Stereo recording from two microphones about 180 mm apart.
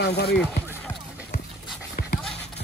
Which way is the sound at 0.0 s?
65° left (ahead or behind).